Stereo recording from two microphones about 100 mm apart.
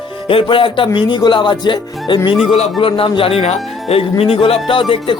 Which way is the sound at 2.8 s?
60° left (ahead or behind).